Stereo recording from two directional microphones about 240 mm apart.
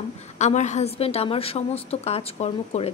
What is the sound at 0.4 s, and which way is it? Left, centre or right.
A woman's voice, left.